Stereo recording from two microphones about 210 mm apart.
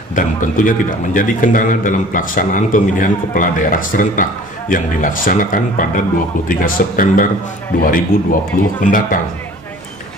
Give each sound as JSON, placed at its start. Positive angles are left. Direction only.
{"t": 0.1, "sound": "a man's voice", "side_deg": 40}